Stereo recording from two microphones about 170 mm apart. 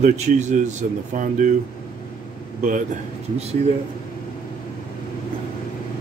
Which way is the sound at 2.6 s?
50° right (ahead or behind).